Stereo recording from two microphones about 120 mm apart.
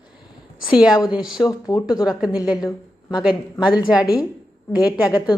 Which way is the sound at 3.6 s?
40° left (ahead or behind).